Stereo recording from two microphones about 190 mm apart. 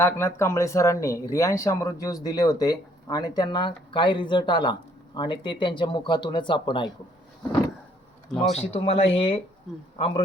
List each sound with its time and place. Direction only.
0.0 s speech: 15° left (ahead or behind)
8.3 s speech: 5° left (ahead or behind)
8.5 s speech: 30° left (ahead or behind)